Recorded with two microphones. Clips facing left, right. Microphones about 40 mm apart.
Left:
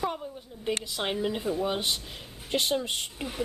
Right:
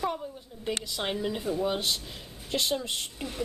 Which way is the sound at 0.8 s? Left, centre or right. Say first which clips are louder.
Left 1 dB; centre.